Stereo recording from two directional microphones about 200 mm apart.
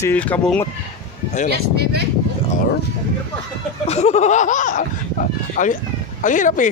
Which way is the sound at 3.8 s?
35° left (ahead or behind).